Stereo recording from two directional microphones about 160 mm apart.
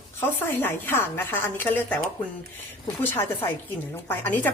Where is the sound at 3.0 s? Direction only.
15° left (ahead or behind).